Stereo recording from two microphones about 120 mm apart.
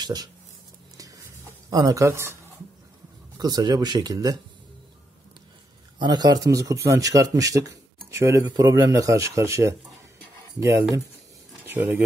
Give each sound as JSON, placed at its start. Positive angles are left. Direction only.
{"t": 0.0, "sound": "speech", "side_deg": -35}
{"t": 0.9, "sound": "music", "side_deg": -30}
{"t": 1.7, "sound": "speech", "side_deg": -30}
{"t": 3.3, "sound": "speech", "side_deg": -35}
{"t": 5.9, "sound": "speech", "side_deg": -35}